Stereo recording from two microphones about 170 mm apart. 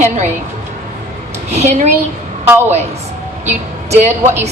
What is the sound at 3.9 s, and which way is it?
Speech, 40° right (ahead or behind).